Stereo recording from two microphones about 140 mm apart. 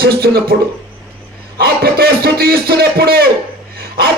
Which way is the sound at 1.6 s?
90° right.